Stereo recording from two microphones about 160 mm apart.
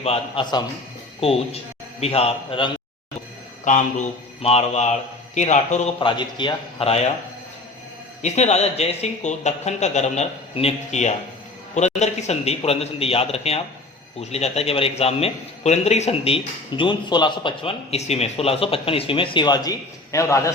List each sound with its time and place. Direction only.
0.0 s a man's voice: 40° left (ahead or behind)
3.6 s speech: 50° left (ahead or behind)
6.0 s a man's voice: 30° left (ahead or behind)
8.2 s a man's voice: 45° left (ahead or behind); by 20.5 s 20° left (ahead or behind)